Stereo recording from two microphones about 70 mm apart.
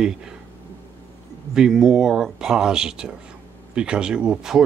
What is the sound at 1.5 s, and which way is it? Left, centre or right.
A man's voice, centre.